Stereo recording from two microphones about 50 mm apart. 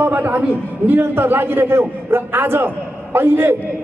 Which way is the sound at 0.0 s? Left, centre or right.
Right.